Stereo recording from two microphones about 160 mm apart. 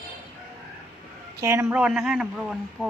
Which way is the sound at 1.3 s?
20° right (ahead or behind).